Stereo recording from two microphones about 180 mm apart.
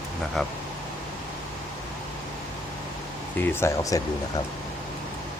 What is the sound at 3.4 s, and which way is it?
Speech, 10° left (ahead or behind).